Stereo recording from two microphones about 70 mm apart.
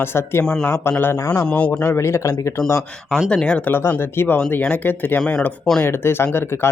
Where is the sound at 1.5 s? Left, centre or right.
Centre.